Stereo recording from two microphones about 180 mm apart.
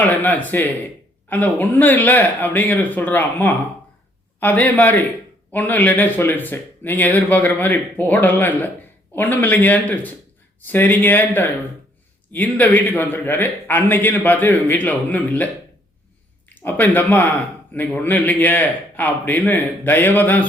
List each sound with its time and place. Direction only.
0.0 s speech: 10° left (ahead or behind)
16.6 s speech: 10° left (ahead or behind)